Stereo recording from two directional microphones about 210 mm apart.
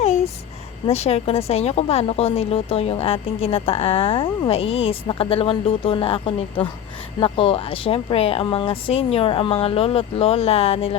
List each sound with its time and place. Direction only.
0.9 s a woman's voice: 30° left (ahead or behind)